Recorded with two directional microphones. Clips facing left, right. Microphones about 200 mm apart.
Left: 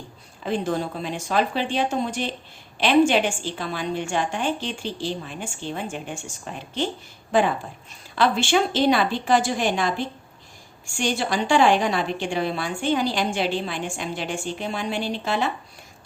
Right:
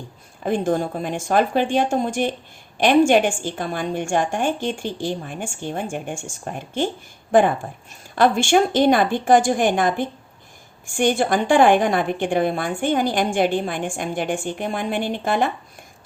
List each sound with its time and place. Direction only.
0.4 s a woman's voice: 50° right (ahead or behind)